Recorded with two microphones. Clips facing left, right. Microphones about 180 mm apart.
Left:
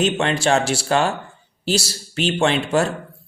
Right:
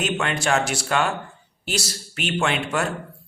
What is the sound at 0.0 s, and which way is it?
Speech, 30° left (ahead or behind).